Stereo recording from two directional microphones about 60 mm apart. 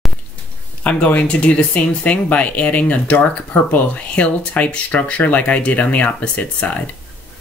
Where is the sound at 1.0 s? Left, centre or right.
Centre.